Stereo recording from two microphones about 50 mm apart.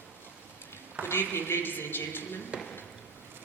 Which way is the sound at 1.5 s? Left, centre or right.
Left.